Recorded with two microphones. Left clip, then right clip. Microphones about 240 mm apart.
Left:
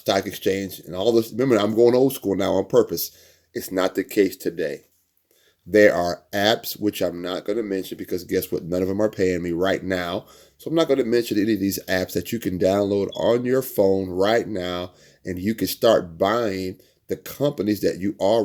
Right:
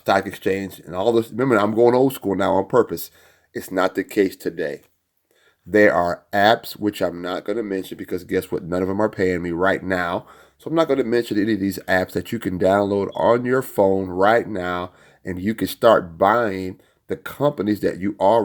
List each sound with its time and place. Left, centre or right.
0.4 s speech: centre
6.0 s speech: centre